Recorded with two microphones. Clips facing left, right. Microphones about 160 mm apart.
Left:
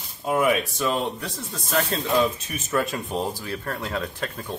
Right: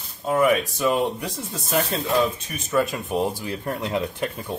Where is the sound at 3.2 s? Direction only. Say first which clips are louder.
Right 3 dB; 20° right (ahead or behind).